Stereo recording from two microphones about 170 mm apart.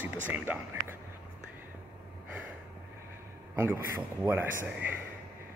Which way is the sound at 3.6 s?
15° right (ahead or behind).